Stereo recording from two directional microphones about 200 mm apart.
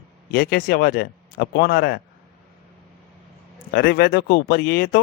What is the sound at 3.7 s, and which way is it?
Speech, 50° left (ahead or behind).